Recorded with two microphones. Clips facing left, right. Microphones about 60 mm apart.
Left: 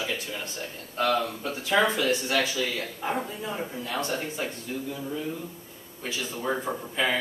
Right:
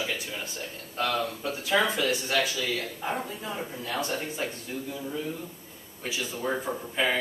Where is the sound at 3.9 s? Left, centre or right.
Left.